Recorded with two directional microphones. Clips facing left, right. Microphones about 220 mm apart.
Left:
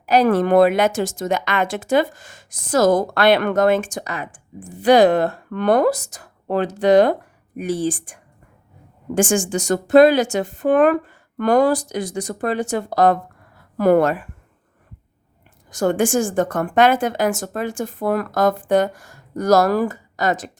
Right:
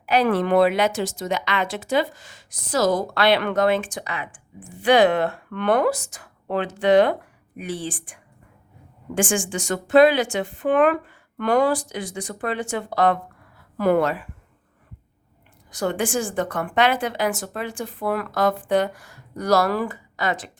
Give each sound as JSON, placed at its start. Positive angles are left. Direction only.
{"t": 0.0, "sound": "speech", "side_deg": 40}
{"t": 15.7, "sound": "speech", "side_deg": 45}